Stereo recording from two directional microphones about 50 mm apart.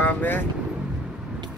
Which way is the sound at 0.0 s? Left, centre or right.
Left.